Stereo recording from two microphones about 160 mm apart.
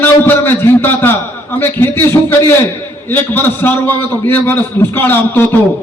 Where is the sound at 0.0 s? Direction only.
15° left (ahead or behind).